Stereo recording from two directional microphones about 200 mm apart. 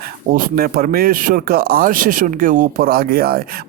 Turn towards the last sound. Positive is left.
turn(degrees=-50)  # may be behind; listen again after turning